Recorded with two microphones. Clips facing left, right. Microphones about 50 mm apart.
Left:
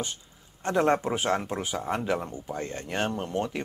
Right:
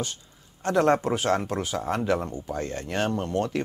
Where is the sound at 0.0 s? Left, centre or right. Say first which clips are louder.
Right 2 dB; left.